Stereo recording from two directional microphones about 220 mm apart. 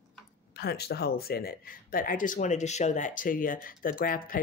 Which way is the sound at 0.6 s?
45° left (ahead or behind).